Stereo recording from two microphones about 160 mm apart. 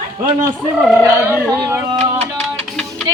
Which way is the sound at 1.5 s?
20° right (ahead or behind).